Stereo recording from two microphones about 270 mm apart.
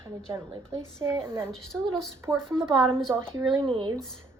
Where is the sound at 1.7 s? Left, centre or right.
Centre.